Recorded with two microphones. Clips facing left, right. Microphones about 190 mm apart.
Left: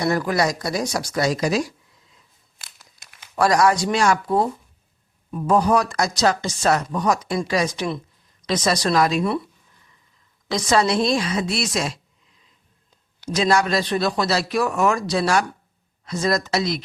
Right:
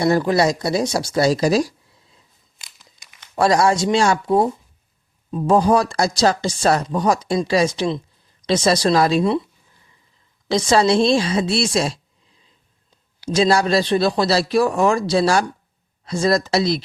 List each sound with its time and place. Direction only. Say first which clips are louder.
0.0 s speech: right 4 dB; 25° right (ahead or behind)
2.6 s crumpling: left 1 dB; centre (ahead or behind)
3.3 s speech: right 1 dB; 25° right (ahead or behind)
10.5 s a woman's voice: right 4 dB; 30° right (ahead or behind)